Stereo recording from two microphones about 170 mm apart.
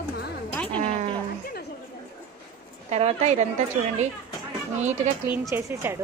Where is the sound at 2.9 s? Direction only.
40° right (ahead or behind).